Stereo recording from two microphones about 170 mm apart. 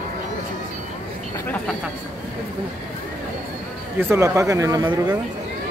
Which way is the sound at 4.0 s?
15° right (ahead or behind).